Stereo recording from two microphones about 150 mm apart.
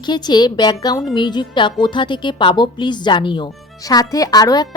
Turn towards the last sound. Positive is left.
turn(degrees=25)  # may be behind; listen again after turning